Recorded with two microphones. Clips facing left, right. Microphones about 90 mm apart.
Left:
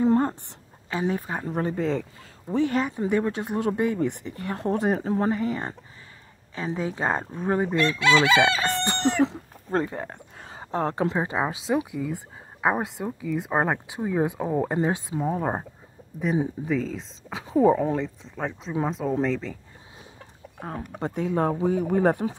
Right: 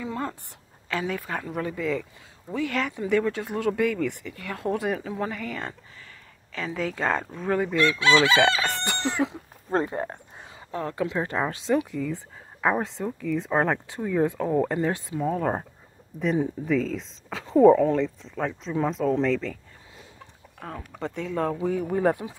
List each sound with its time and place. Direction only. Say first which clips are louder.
0.0 s a sound: left 10 dB; 45° left (ahead or behind)
1.0 s speech: left 3 dB; 30° left (ahead or behind)
8.6 s chicken: left 4 dB; 30° left (ahead or behind)
9.7 s speech: right 1 dB; 35° right (ahead or behind)
10.5 s speech: left 5 dB; 35° left (ahead or behind)
11.1 s speech: left 1 dB; 15° left (ahead or behind)
16.3 s speech: right 1 dB; 5° left (ahead or behind)
20.6 s speech: left 2 dB; 40° left (ahead or behind)
21.3 s speech: left 2 dB; 30° left (ahead or behind)
21.8 s speech: left 1 dB; 55° left (ahead or behind)